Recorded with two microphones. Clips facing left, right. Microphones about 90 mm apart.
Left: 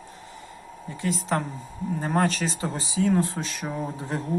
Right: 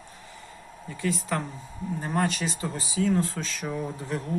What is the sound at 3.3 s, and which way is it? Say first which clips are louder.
Speech: left 1 dB; 20° left (ahead or behind).